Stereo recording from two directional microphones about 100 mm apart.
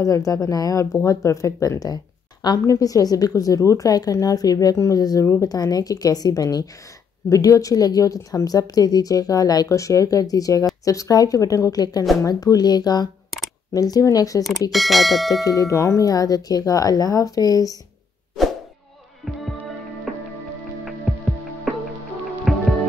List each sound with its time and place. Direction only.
0.0 s a woman's voice: 35° left (ahead or behind)
14.7 s speech: centre (ahead or behind)
15.4 s a woman's voice: 35° left (ahead or behind)
22.5 s music: centre (ahead or behind)